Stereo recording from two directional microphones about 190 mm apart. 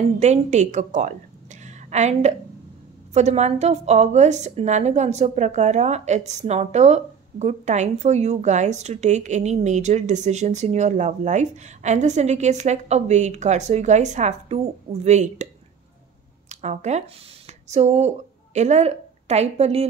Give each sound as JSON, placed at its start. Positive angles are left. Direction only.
{"t": 0.2, "sound": "a woman's voice", "side_deg": -40}
{"t": 16.4, "sound": "speech", "side_deg": -35}